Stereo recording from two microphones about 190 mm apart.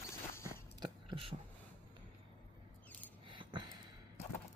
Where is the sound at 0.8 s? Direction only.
25° right (ahead or behind).